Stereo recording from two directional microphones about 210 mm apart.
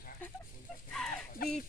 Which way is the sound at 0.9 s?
Centre (ahead or behind).